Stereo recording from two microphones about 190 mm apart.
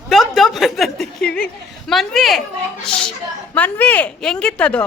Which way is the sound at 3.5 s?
10° left (ahead or behind).